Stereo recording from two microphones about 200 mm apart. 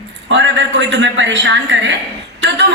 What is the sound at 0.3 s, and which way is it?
A man's voice, 65° right (ahead or behind).